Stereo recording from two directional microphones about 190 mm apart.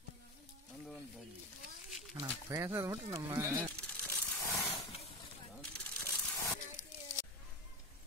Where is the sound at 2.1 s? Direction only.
20° right (ahead or behind).